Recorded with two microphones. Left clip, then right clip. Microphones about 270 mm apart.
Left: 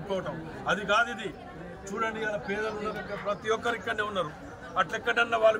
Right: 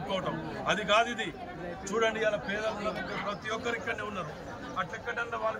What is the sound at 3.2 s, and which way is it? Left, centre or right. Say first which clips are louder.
Speech: left 8 dB; centre.